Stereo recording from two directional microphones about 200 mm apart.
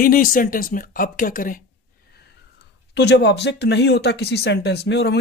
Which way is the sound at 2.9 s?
60° left (ahead or behind).